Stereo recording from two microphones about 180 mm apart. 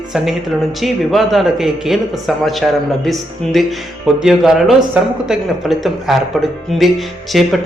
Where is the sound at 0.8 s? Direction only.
Centre (ahead or behind).